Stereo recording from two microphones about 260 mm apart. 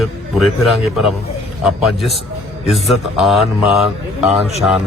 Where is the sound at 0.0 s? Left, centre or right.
Centre.